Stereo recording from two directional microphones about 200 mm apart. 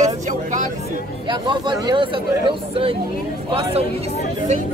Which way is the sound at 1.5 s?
25° right (ahead or behind).